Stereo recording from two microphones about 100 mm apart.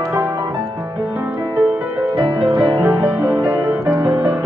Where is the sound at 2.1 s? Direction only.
50° right (ahead or behind).